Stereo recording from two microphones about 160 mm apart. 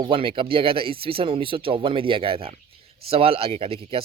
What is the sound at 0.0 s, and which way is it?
Speech, 35° right (ahead or behind).